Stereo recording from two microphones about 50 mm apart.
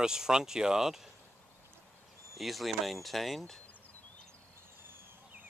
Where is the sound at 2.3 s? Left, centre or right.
Centre.